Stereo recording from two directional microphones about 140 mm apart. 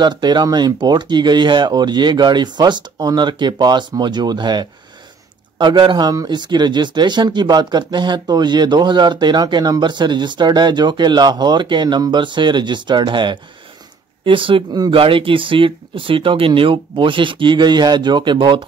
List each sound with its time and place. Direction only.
0.0 s speech: 30° right (ahead or behind)